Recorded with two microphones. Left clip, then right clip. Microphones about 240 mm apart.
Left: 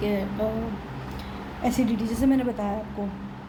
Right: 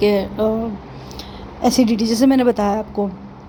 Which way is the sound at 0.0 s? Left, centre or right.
Right.